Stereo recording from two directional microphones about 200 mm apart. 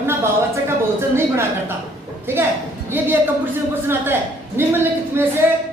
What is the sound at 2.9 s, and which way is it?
Speech, 10° right (ahead or behind).